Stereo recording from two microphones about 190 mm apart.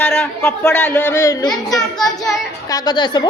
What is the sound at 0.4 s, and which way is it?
A man's voice, 15° left (ahead or behind).